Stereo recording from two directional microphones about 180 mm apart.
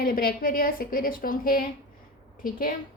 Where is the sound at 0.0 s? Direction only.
55° left (ahead or behind).